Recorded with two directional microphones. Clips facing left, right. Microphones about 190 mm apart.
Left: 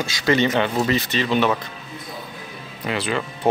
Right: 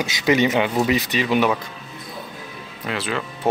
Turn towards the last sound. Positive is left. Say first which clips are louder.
# left 2 dB
turn(degrees=0)  # may be behind; listen again after turning